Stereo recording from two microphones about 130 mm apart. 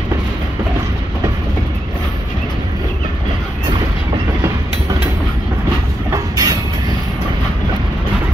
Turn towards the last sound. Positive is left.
turn(degrees=-30)  # may be behind; listen again after turning